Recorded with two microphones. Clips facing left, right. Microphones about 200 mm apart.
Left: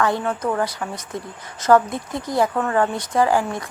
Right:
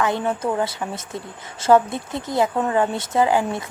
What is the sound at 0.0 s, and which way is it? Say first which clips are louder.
Speech: even; 20° right (ahead or behind).